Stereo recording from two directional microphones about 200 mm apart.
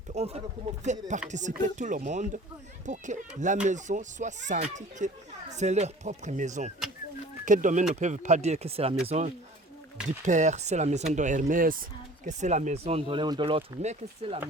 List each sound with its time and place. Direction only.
0.1 s speech: 30° right (ahead or behind)